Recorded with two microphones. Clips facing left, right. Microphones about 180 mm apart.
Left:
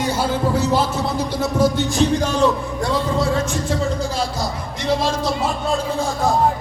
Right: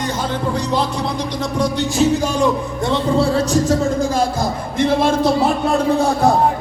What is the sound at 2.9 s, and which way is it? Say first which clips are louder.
Speech: right 4 dB; 30° right (ahead or behind).